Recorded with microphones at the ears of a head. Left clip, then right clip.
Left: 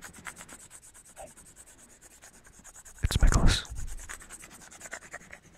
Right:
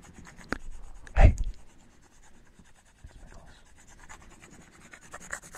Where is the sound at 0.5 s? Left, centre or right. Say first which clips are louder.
Right 13 dB; right.